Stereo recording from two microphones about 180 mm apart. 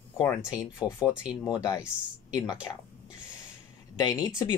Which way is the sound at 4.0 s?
20° left (ahead or behind).